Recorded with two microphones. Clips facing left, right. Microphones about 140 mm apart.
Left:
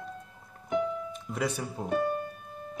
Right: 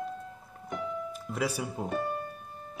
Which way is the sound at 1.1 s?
Centre (ahead or behind).